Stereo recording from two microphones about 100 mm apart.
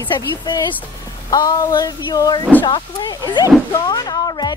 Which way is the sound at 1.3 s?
40° left (ahead or behind).